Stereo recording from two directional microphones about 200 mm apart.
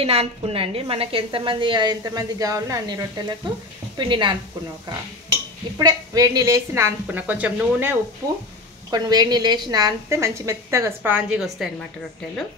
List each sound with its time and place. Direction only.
0.0 s a woman's voice: 30° right (ahead or behind)
5.8 s a woman's voice: 20° right (ahead or behind)
8.9 s a woman's voice: 20° right (ahead or behind); by 11.7 s centre (ahead or behind)